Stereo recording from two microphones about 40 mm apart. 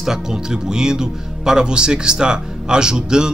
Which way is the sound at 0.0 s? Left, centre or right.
Centre.